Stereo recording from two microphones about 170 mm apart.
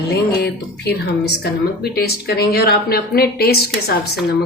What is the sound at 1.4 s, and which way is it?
Speech, 65° left (ahead or behind).